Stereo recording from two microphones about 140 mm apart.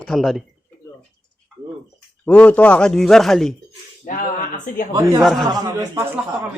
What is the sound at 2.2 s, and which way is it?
Speech, 10° left (ahead or behind).